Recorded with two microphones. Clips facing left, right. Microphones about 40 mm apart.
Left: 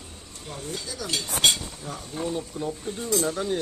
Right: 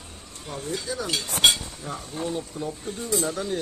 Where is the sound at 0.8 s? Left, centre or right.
Right.